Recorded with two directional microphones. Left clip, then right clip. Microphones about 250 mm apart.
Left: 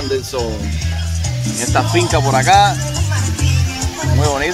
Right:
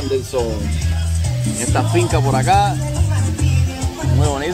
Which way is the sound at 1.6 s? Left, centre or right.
Centre.